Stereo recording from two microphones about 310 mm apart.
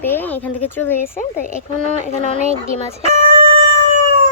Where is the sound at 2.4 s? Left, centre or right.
Centre.